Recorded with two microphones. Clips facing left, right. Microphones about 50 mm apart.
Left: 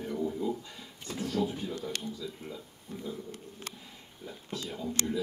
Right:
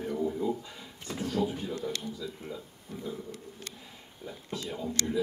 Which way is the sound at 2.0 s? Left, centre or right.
Centre.